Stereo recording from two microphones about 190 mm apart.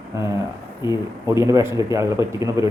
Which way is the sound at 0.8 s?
15° right (ahead or behind).